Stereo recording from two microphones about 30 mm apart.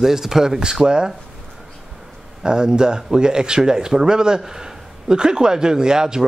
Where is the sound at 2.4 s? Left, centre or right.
Right.